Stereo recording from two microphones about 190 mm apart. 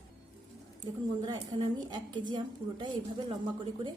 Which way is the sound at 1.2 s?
20° right (ahead or behind).